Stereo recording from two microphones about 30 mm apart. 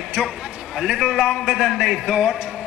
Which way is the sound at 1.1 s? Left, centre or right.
Centre.